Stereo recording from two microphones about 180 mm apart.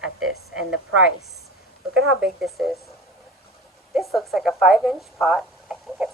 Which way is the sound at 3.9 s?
Centre (ahead or behind).